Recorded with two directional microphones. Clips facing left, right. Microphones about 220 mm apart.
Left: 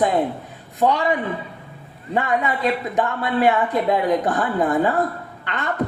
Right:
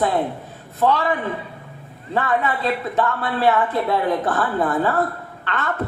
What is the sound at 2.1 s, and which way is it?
Speech, 15° left (ahead or behind).